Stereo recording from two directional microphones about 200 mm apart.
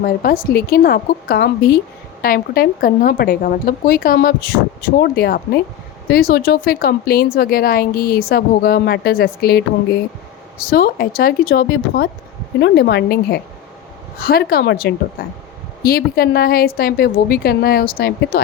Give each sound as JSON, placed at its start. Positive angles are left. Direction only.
{"t": 0.0, "sound": "a woman's voice", "side_deg": 45}